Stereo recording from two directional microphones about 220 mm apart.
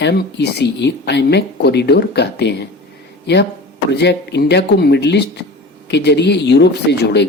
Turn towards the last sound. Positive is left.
turn(degrees=50)  # may be behind; listen again after turning